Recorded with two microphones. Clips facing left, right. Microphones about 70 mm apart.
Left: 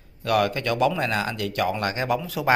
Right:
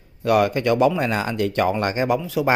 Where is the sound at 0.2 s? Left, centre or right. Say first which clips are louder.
Right 4 dB; centre.